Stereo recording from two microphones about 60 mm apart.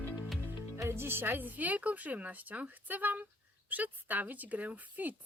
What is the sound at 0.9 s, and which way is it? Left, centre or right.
Speech, right.